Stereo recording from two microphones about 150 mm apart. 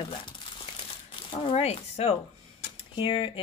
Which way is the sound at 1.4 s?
40° left (ahead or behind).